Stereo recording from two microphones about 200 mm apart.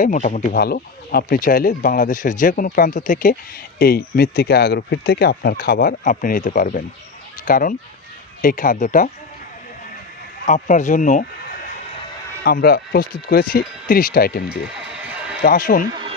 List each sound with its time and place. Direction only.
0.0 s speech: 40° left (ahead or behind)
0.6 s speech: 50° left (ahead or behind)
10.4 s speech: 40° left (ahead or behind)
12.4 s speech: 45° left (ahead or behind)